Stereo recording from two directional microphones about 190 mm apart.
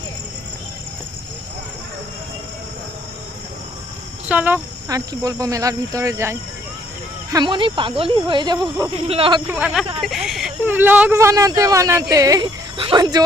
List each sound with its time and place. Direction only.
4.3 s speech: 10° right (ahead or behind); by 9.4 s 30° right (ahead or behind)
9.5 s speech: 5° right (ahead or behind)